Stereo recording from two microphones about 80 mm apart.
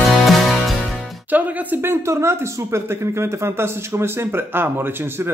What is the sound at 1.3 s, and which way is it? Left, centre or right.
Speech, right.